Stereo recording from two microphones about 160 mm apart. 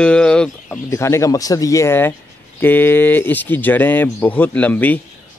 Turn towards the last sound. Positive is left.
turn(degrees=10)  # may be behind; listen again after turning